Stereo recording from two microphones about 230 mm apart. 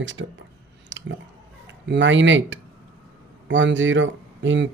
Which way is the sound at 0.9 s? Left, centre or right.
Right.